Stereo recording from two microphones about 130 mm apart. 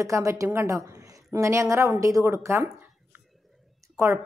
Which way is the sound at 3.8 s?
25° right (ahead or behind).